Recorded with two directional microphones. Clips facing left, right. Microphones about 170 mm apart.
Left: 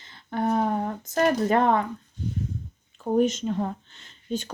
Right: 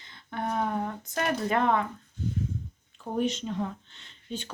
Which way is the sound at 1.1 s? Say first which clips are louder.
Left 6 dB; 35° left (ahead or behind).